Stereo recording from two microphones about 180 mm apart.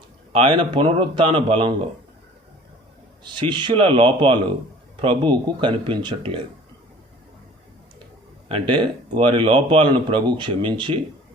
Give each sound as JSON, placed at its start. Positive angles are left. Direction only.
{"t": 0.3, "sound": "speech", "side_deg": -30}
{"t": 3.2, "sound": "speech", "side_deg": -25}
{"t": 8.4, "sound": "speech", "side_deg": -30}